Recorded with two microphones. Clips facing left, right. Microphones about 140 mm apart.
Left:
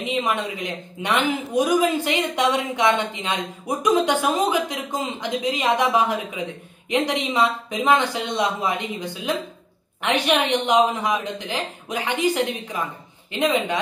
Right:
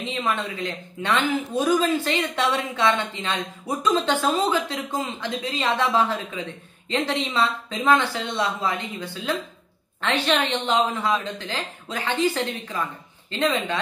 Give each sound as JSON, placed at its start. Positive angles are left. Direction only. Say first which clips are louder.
{"t": 0.0, "sound": "speech", "louder": "left 3 dB", "side_deg": 15}